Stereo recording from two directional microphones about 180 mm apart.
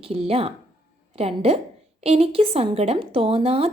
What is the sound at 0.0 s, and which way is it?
A woman's voice, 30° right (ahead or behind).